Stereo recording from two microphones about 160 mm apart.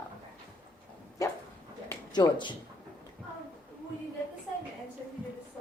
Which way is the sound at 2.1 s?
25° left (ahead or behind).